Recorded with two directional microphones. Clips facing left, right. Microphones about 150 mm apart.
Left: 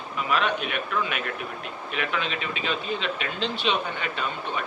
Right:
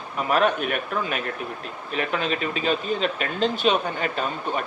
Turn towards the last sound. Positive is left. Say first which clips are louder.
# right 4 dB
turn(degrees=-40)  # may be behind; listen again after turning